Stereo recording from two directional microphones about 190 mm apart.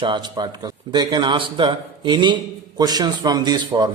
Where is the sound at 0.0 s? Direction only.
25° right (ahead or behind).